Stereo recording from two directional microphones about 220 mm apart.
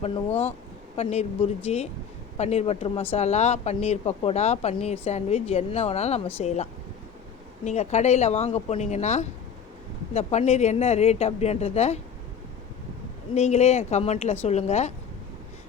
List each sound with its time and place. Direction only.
0.0 s speech: 25° left (ahead or behind)
7.6 s speech: 30° left (ahead or behind)
13.3 s speech: 30° left (ahead or behind)